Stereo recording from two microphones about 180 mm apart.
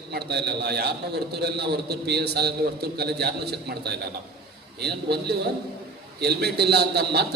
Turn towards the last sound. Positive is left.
turn(degrees=-65)  # may be behind; listen again after turning